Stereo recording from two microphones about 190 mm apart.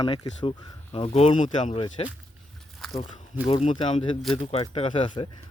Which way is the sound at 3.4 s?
30° left (ahead or behind).